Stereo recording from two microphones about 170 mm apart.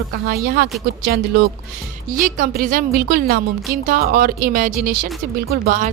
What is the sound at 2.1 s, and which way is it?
A woman's voice, 55° right (ahead or behind).